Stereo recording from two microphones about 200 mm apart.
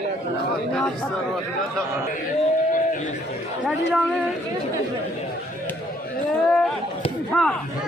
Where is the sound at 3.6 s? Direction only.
5° left (ahead or behind).